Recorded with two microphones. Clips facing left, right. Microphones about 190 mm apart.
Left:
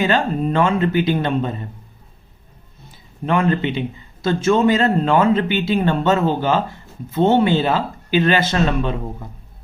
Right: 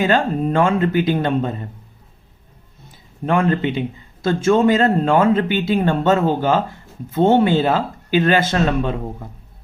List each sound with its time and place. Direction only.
0.0 s a man's voice: 50° right (ahead or behind)
3.2 s a man's voice: 45° right (ahead or behind)